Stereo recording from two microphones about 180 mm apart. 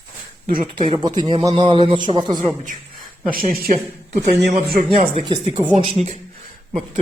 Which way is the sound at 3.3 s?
55° right (ahead or behind).